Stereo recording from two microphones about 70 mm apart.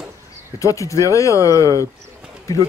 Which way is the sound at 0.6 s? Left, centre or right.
Left.